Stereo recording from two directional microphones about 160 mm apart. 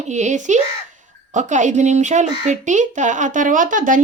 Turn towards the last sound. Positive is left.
turn(degrees=-55)  # may be behind; listen again after turning